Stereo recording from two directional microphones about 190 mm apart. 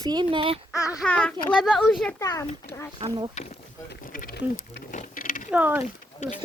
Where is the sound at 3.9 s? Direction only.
50° left (ahead or behind).